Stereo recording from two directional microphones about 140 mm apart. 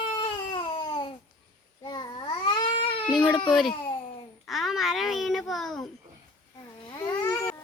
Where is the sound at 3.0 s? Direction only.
5° left (ahead or behind).